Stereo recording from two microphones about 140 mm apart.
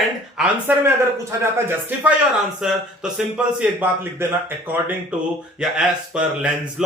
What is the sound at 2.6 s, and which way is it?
Speech, 5° right (ahead or behind).